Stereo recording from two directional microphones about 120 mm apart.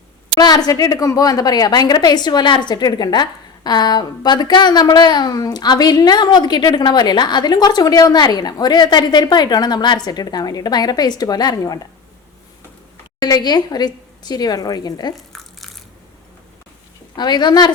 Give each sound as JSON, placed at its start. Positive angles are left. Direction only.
{"t": 0.3, "sound": "a woman's voice", "side_deg": 35}
{"t": 13.1, "sound": "a woman's voice", "side_deg": 35}
{"t": 15.1, "sound": "crumpling", "side_deg": 0}
{"t": 17.2, "sound": "a woman's voice", "side_deg": 35}